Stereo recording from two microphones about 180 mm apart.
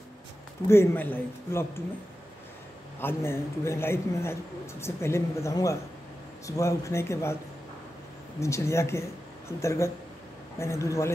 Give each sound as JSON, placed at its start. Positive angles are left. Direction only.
{"t": 0.7, "sound": "a man's voice", "side_deg": 10}
{"t": 3.0, "sound": "a man's voice", "side_deg": 15}
{"t": 8.4, "sound": "a man's voice", "side_deg": 15}